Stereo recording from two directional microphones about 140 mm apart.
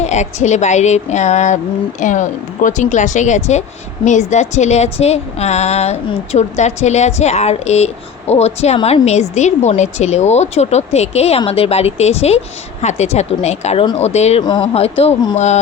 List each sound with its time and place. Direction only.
0.0 s a woman's voice: 55° left (ahead or behind)
14.4 s speech: 30° left (ahead or behind)
14.7 s a woman's voice: 45° left (ahead or behind)